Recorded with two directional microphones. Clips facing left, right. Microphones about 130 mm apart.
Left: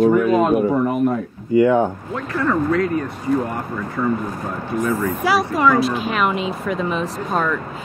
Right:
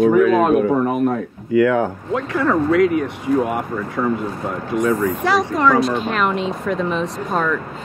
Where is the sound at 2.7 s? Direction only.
90° right.